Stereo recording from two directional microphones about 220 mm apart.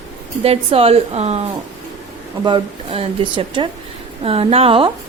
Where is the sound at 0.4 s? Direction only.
25° right (ahead or behind).